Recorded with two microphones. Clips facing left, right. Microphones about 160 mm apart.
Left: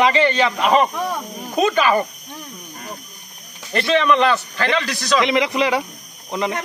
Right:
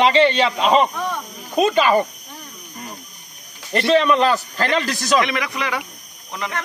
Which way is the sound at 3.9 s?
35° right (ahead or behind).